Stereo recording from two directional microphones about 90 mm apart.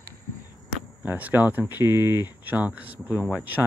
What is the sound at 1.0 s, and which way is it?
Speech, 20° right (ahead or behind).